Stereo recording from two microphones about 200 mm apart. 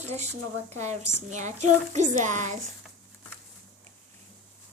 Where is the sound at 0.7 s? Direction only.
35° right (ahead or behind).